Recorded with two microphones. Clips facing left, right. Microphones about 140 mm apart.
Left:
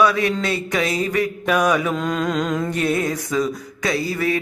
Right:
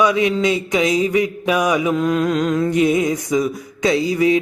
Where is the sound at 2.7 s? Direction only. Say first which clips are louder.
Right 5 dB; 15° right (ahead or behind).